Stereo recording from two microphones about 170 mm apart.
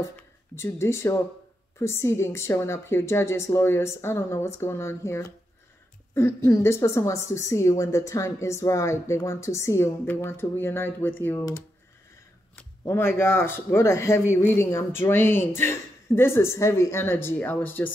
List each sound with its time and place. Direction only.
0.6 s a woman's voice: 15° left (ahead or behind)